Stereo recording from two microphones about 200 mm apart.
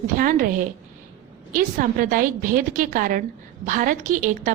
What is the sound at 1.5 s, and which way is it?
A woman's voice, 45° right (ahead or behind).